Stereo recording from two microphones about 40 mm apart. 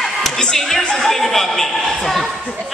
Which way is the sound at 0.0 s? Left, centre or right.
Centre.